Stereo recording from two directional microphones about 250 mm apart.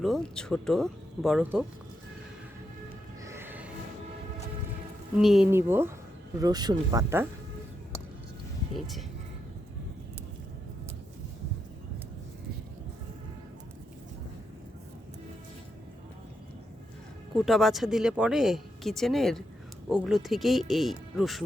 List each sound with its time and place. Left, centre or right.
0.0 s speech: centre
3.2 s music: centre
5.2 s speech: centre
8.7 s speech: centre
17.3 s speech: centre